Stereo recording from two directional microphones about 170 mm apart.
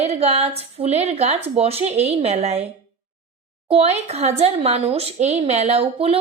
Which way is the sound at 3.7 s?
35° right (ahead or behind).